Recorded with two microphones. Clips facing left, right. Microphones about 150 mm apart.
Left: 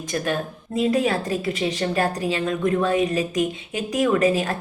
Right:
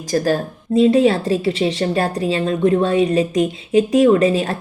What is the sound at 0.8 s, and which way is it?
A woman's voice, 30° right (ahead or behind).